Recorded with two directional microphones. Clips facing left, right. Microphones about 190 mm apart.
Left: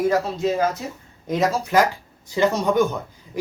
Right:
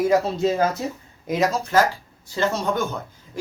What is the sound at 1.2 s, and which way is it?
Speech, 5° right (ahead or behind).